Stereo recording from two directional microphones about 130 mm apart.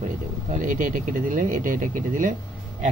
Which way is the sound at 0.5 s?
90° right.